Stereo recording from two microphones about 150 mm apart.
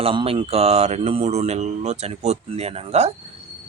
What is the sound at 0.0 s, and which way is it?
Speech, 35° right (ahead or behind).